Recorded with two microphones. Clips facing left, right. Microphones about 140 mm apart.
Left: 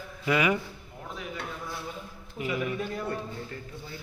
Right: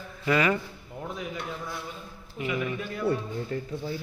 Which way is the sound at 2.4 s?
35° left (ahead or behind).